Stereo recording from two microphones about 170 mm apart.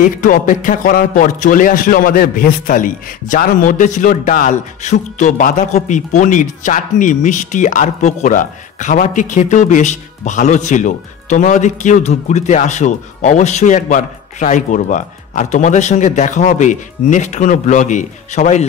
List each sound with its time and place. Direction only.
0.2 s a man's voice: 50° left (ahead or behind)